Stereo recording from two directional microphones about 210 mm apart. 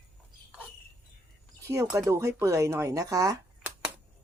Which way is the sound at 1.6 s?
15° right (ahead or behind).